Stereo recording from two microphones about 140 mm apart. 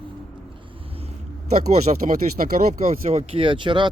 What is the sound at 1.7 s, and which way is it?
Speech, 55° right (ahead or behind).